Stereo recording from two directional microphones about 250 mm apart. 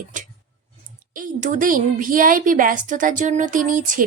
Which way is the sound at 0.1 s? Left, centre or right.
Right.